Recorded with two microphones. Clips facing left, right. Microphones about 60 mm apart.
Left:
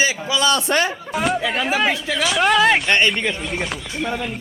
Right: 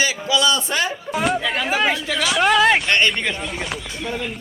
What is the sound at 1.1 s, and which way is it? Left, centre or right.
Speech, centre.